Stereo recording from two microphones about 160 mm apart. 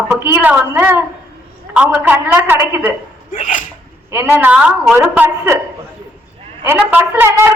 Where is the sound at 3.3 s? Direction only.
50° left (ahead or behind).